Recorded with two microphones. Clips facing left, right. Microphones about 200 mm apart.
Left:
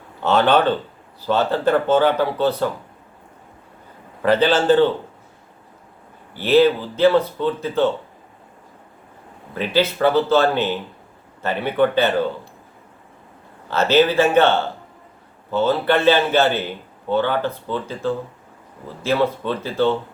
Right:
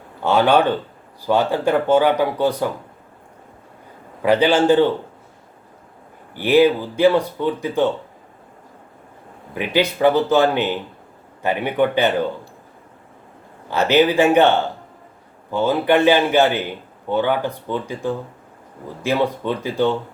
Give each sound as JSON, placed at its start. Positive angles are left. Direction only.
{"t": 0.2, "sound": "speech", "side_deg": -10}
{"t": 4.2, "sound": "speech", "side_deg": -15}
{"t": 6.3, "sound": "speech", "side_deg": -15}
{"t": 9.6, "sound": "speech", "side_deg": -15}
{"t": 13.7, "sound": "speech", "side_deg": -15}